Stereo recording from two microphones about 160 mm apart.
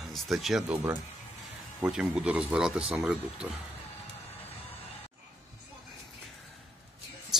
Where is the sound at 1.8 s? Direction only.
5° right (ahead or behind).